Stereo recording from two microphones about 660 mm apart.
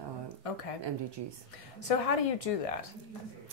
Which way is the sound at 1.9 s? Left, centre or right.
Left.